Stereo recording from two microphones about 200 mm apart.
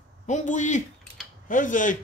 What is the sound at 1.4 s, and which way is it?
Speech, 40° left (ahead or behind).